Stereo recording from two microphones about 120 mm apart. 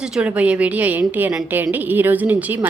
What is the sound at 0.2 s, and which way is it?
A woman's voice, 10° right (ahead or behind).